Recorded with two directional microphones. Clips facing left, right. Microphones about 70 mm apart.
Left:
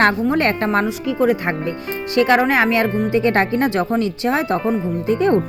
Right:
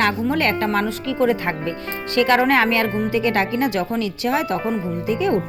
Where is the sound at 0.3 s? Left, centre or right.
Left.